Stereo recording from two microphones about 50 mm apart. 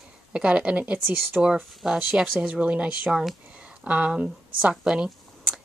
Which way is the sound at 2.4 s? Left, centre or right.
Right.